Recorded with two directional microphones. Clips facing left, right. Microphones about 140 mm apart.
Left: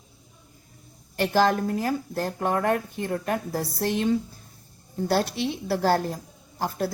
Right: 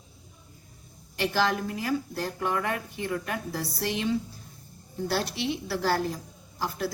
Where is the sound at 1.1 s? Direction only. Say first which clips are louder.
Left 5 dB; 45° left (ahead or behind).